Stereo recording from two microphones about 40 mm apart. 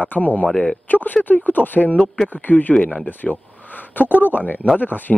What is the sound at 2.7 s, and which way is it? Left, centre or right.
Speech, left.